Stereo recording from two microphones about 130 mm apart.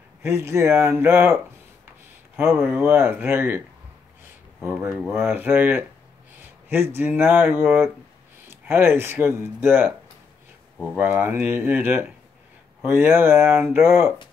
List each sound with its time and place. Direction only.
0.2 s speech: 20° right (ahead or behind)
4.6 s speech: 15° right (ahead or behind)
7.0 s speech: 15° right (ahead or behind)
11.0 s speech: 15° right (ahead or behind)